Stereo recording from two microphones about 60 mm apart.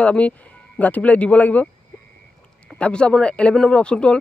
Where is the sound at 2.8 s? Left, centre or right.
Centre.